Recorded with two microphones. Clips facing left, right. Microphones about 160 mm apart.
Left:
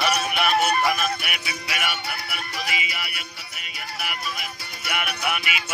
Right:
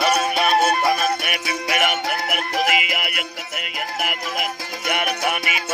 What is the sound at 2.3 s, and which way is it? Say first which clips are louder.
Music: right 11 dB; 85° right.